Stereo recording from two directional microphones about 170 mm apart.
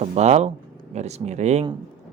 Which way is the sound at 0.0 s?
40° right (ahead or behind).